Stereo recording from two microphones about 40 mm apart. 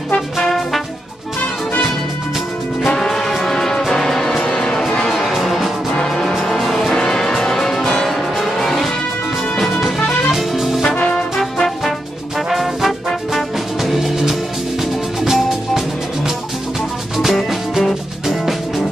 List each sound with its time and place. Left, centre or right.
0.4 s brass instrument: centre
2.9 s music: centre
5.9 s music: centre
6.3 s music: centre
9.9 s music: centre
10.3 s music: centre
11.0 s brass instrument: left
12.4 s music: centre